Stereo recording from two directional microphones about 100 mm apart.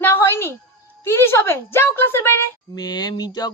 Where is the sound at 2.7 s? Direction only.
45° left (ahead or behind).